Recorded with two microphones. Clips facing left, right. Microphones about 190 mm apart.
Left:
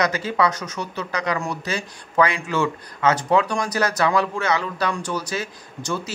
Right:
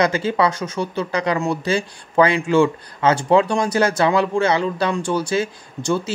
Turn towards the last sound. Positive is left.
turn(degrees=-30)  # may be behind; listen again after turning